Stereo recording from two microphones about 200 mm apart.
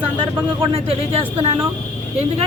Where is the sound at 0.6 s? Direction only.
30° right (ahead or behind).